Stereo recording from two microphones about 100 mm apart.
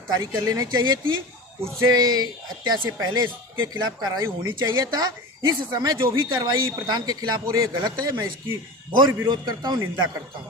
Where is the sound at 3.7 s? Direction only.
45° right (ahead or behind).